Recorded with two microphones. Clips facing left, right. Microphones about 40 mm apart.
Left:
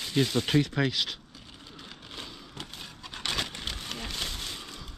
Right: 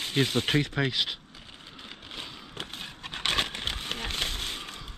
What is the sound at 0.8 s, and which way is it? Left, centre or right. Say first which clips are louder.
Speech: right 1 dB; right.